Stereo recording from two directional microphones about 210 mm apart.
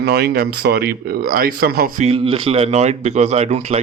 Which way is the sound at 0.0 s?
50° right (ahead or behind).